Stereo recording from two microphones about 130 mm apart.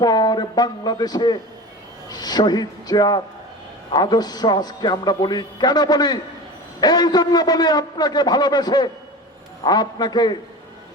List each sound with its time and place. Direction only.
0.0 s a man's voice: 35° left (ahead or behind)